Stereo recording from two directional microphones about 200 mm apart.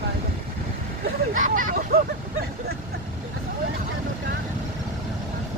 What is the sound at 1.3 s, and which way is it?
Hubbub, 40° right (ahead or behind).